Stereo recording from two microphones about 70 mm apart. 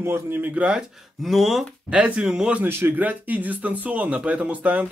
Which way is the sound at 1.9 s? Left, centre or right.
Centre.